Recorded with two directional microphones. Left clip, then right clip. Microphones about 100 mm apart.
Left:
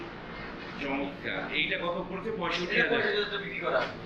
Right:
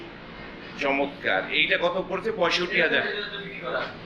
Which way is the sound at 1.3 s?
25° left (ahead or behind).